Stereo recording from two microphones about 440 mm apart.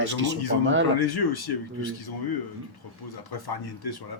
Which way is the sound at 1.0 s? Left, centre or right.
Left.